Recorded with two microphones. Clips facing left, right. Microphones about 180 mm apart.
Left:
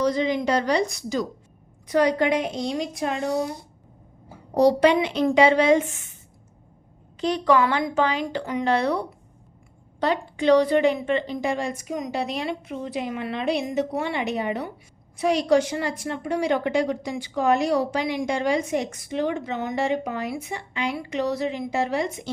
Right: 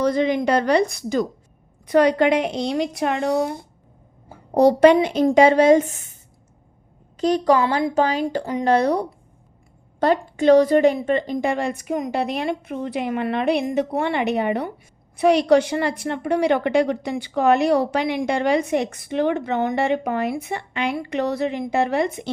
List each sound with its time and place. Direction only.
0.0 s a woman's voice: 55° right (ahead or behind)
4.9 s a woman's voice: 40° right (ahead or behind)
7.2 s speech: 40° right (ahead or behind)
7.6 s a woman's voice: 30° right (ahead or behind)
7.9 s a woman's voice: 40° right (ahead or behind); by 22.3 s 60° right (ahead or behind)